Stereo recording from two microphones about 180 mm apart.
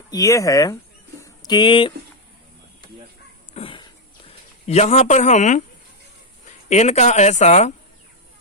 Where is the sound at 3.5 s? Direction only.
30° left (ahead or behind).